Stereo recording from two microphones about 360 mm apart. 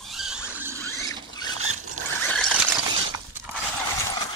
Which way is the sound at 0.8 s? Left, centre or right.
Centre.